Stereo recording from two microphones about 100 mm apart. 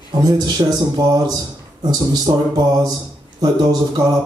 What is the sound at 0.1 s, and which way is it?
Speech, 40° right (ahead or behind).